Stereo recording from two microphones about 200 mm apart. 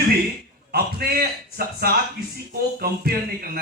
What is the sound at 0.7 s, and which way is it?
A man's voice, 50° right (ahead or behind).